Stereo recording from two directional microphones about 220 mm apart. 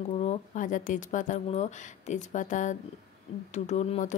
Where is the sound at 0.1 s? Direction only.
30° left (ahead or behind).